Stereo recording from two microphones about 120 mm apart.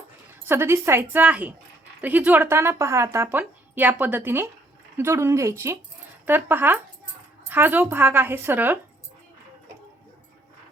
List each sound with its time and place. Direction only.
0.4 s speech: 20° right (ahead or behind)